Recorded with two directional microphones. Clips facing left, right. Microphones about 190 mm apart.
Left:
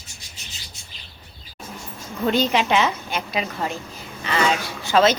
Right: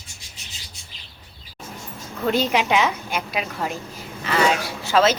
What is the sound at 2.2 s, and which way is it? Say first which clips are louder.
A woman's voice: left 1 dB; 5° right (ahead or behind).